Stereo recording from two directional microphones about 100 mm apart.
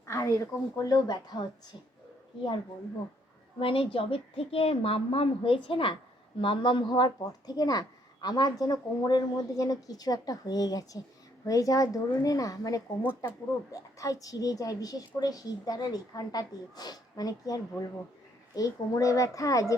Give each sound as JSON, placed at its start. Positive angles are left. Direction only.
{"t": 0.1, "sound": "speech", "side_deg": 30}
{"t": 3.6, "sound": "a woman's voice", "side_deg": 65}